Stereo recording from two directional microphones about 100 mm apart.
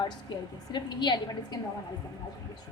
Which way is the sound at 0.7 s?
50° left (ahead or behind).